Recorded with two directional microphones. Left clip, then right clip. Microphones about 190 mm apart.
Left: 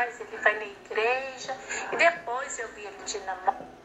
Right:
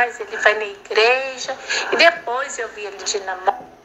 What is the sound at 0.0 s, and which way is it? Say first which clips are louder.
A woman's voice: right 9 dB; 50° right (ahead or behind).